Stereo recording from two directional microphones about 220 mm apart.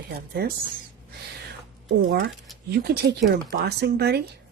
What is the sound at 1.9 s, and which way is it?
Speech, 50° right (ahead or behind).